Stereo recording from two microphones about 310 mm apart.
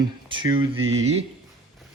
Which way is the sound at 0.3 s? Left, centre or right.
Centre.